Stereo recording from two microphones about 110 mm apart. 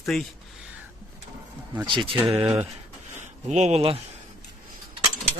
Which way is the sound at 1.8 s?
50° right (ahead or behind).